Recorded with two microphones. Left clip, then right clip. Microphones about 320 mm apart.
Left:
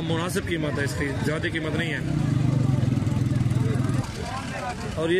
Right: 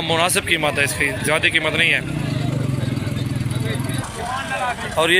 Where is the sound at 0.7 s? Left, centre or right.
Right.